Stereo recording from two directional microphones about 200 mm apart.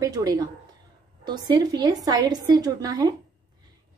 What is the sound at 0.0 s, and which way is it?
A woman's voice, 20° right (ahead or behind).